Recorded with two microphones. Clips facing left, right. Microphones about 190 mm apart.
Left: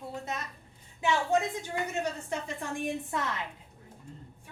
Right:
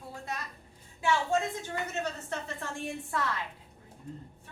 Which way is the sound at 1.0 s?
20° left (ahead or behind).